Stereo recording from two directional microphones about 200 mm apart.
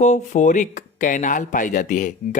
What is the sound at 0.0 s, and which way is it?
Speech, 35° left (ahead or behind).